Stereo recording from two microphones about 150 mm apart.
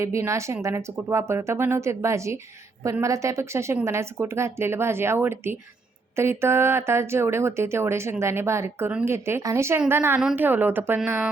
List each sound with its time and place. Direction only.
0.0 s a woman's voice: 20° right (ahead or behind)